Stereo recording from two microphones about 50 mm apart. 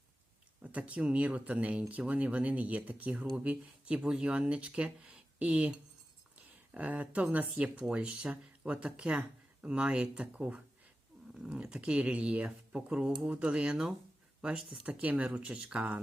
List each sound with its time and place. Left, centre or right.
0.6 s speech: right
6.3 s a sound: right
7.8 s speech: centre